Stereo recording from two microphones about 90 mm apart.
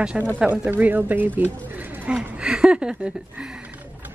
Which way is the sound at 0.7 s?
20° right (ahead or behind).